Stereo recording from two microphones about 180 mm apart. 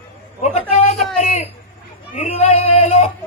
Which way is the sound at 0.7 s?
40° left (ahead or behind).